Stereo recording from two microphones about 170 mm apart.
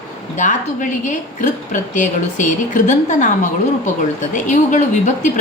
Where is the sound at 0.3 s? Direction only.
45° left (ahead or behind).